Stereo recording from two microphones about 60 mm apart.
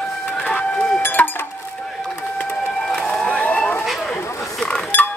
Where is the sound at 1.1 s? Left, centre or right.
Left.